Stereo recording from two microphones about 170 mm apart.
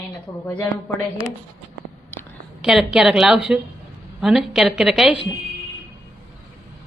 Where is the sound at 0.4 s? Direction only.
10° left (ahead or behind).